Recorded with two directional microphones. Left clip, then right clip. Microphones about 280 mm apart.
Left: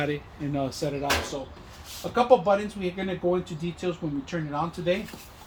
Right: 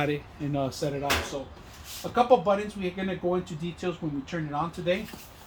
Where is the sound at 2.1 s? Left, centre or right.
Centre.